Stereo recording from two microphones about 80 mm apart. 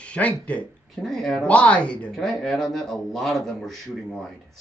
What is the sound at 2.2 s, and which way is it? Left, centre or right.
A man's voice, centre.